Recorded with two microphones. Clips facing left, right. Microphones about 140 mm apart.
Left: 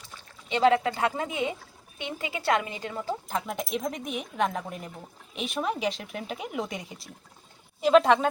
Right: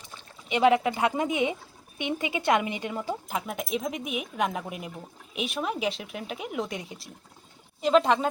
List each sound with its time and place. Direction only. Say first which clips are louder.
0.0 s a woman's voice: right 2 dB; 15° right (ahead or behind)